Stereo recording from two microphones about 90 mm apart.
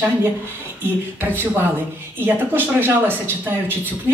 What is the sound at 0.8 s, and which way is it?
A man's voice, 25° right (ahead or behind).